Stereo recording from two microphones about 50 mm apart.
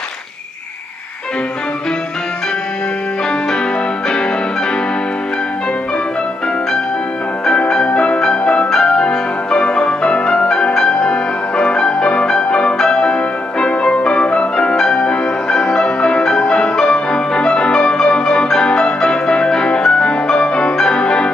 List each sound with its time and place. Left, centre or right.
7.4 s music: centre